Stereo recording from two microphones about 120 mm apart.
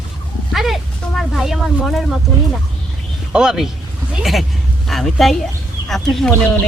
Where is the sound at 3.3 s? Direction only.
5° right (ahead or behind).